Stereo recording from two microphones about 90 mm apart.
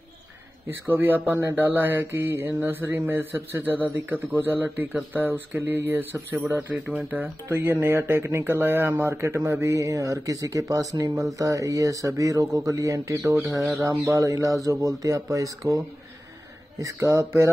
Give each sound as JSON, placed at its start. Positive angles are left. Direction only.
{"t": 0.7, "sound": "speech", "side_deg": -20}
{"t": 7.4, "sound": "speech", "side_deg": -30}
{"t": 16.8, "sound": "speech", "side_deg": -35}